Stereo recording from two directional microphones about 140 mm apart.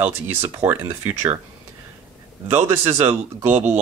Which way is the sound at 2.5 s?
15° right (ahead or behind).